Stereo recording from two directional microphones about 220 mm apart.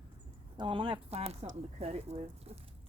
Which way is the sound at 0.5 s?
20° right (ahead or behind).